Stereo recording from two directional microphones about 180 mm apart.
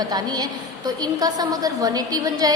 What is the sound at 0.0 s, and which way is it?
A woman's voice, 20° right (ahead or behind).